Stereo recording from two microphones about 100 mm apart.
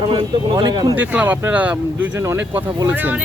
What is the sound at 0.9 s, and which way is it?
Speech, 15° right (ahead or behind).